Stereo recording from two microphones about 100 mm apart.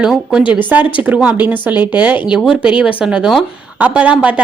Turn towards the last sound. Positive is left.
turn(degrees=-10)  # may be behind; listen again after turning